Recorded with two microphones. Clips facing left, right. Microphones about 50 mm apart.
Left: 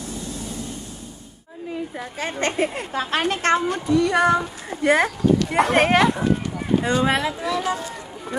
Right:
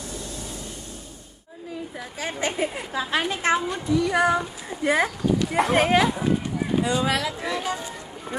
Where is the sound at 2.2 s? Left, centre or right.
Left.